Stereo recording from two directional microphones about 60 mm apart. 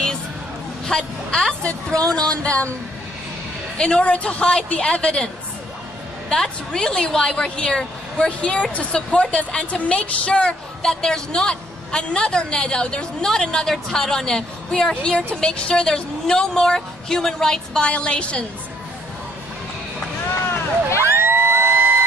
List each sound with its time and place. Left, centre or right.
0.8 s a woman's voice: centre
3.7 s a woman's voice: centre
21.0 s a sound: right